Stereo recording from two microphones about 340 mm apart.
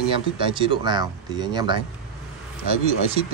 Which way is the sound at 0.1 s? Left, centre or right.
Centre.